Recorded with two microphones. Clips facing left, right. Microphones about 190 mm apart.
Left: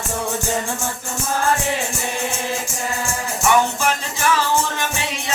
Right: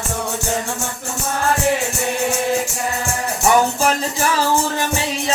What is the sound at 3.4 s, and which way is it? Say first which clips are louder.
Music: right 2 dB; 35° right (ahead or behind).